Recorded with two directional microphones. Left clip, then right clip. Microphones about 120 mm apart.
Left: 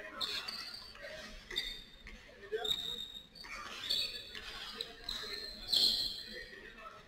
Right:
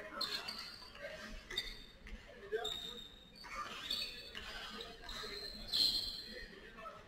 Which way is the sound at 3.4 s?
30° left (ahead or behind).